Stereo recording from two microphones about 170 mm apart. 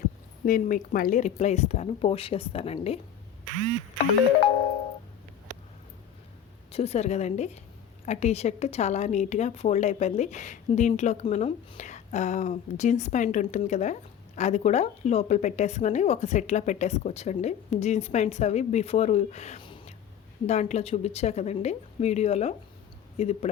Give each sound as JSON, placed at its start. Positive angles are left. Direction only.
{"t": 0.4, "sound": "speech", "side_deg": 55}
{"t": 6.7, "sound": "a woman's voice", "side_deg": 35}